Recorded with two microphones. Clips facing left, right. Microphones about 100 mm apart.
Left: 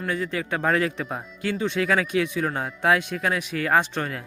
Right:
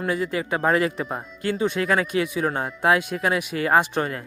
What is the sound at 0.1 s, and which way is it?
Speech, 5° right (ahead or behind).